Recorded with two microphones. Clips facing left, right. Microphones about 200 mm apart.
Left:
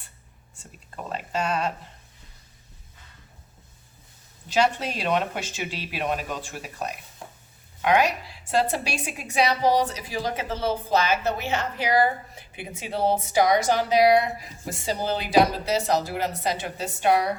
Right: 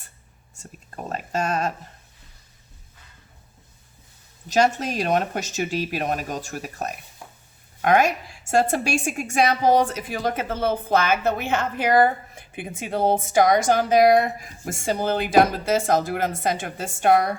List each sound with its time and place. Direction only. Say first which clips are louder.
0.5 s whispering: right 2 dB; 45° right (ahead or behind)
4.4 s a woman's voice: right 3 dB; 45° right (ahead or behind)